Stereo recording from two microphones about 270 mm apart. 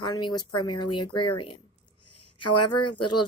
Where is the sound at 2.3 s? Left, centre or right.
Left.